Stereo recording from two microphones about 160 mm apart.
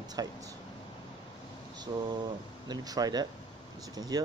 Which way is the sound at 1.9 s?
20° right (ahead or behind).